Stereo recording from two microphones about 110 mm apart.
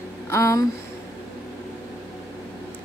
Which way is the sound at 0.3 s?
25° left (ahead or behind).